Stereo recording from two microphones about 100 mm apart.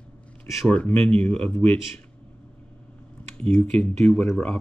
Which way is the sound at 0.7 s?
15° left (ahead or behind).